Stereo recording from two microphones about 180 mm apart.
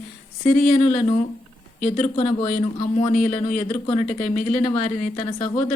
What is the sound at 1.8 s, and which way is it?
Speech, 40° left (ahead or behind).